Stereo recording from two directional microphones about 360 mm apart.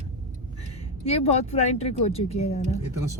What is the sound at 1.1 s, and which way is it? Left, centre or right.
Speech, centre.